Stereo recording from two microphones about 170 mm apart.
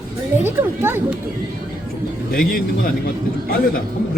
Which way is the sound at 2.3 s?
60° left (ahead or behind).